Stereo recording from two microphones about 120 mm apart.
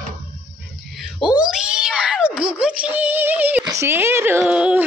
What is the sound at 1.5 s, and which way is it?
Speech, 5° right (ahead or behind).